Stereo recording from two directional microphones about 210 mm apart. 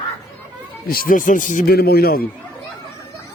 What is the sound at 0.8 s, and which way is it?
Speech, 45° left (ahead or behind).